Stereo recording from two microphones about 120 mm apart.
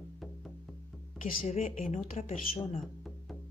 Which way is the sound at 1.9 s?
80° left.